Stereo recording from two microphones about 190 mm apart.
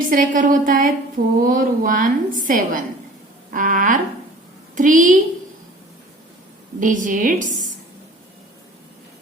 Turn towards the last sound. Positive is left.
turn(degrees=-45)  # may be behind; listen again after turning